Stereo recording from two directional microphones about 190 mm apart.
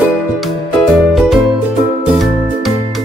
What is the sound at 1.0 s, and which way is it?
Music, centre (ahead or behind).